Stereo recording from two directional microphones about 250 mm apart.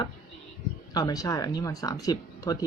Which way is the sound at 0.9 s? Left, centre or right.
Centre.